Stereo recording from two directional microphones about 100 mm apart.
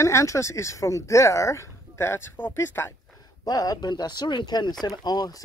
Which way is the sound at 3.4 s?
40° left (ahead or behind).